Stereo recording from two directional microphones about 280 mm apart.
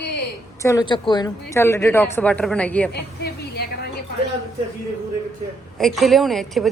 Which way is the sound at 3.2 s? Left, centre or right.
Left.